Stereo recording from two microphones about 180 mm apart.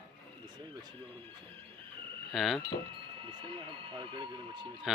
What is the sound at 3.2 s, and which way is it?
Speech, 30° right (ahead or behind).